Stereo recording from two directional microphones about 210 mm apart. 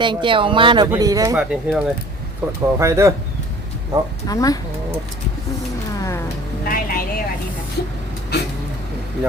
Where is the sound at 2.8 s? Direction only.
15° right (ahead or behind).